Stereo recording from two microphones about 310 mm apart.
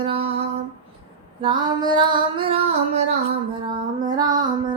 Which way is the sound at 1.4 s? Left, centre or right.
Centre.